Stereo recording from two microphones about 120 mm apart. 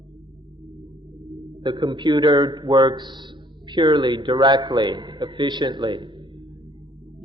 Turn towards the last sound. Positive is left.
turn(degrees=-40)  # may be behind; listen again after turning